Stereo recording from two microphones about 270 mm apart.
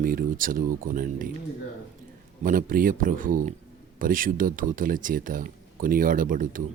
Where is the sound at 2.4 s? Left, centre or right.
Right.